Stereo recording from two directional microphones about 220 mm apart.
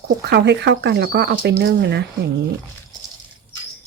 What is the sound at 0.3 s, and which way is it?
Speech, 50° right (ahead or behind).